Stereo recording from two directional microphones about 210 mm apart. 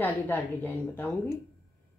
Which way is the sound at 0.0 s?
10° left (ahead or behind).